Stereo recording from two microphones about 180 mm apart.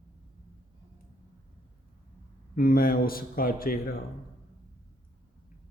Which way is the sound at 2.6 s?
55° left (ahead or behind).